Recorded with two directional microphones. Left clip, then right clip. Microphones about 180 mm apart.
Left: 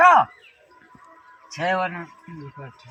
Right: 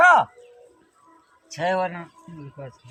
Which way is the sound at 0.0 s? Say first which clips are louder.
Left 1 dB; 35° right (ahead or behind).